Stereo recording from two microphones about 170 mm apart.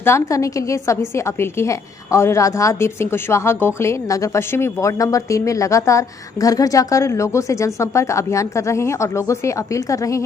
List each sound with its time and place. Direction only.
0.0 s a woman's voice: 15° left (ahead or behind)